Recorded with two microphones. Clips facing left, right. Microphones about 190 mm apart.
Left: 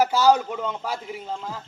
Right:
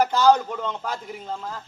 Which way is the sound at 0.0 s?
10° left (ahead or behind).